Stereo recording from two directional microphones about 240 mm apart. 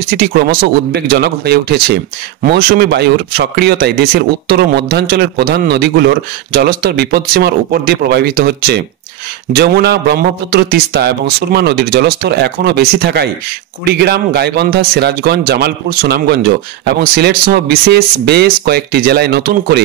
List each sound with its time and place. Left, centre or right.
0.1 s speech: right